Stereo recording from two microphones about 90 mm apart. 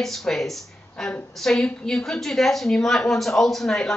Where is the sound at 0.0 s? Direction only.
5° left (ahead or behind).